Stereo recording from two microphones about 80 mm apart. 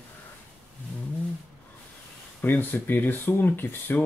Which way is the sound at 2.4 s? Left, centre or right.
Left.